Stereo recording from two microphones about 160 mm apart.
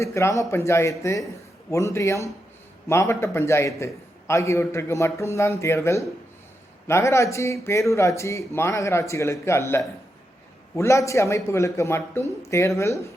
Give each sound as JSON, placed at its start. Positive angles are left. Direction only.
{"t": 0.0, "sound": "a man's voice", "side_deg": 20}